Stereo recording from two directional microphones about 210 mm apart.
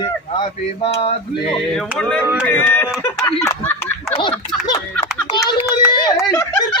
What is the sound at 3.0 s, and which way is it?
Speech, 10° left (ahead or behind).